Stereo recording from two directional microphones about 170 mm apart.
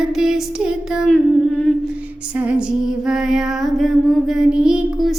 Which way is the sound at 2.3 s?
10° right (ahead or behind).